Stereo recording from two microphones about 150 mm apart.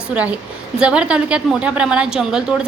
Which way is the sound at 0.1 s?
10° right (ahead or behind).